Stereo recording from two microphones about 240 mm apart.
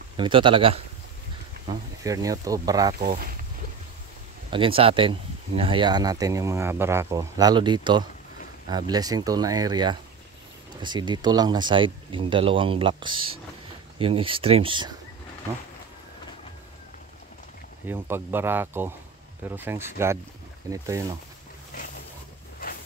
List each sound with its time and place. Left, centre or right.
0.2 s speech: right
2.9 s speech: right
4.5 s speech: right
17.8 s speech: centre